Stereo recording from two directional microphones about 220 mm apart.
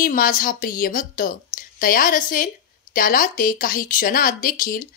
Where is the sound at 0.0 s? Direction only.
40° left (ahead or behind).